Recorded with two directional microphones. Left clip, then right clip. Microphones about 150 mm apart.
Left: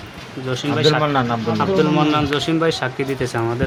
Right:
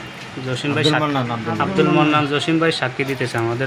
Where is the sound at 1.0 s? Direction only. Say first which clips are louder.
Left 3 dB; 80° left.